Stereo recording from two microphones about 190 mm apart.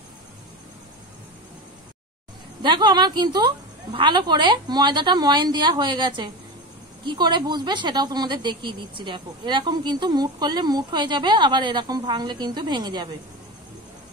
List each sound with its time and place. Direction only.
2.6 s speech: 25° right (ahead or behind)